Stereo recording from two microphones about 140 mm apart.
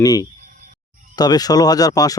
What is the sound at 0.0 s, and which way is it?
Speech, 25° left (ahead or behind).